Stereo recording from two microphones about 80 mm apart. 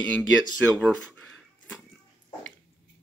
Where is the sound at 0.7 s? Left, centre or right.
Centre.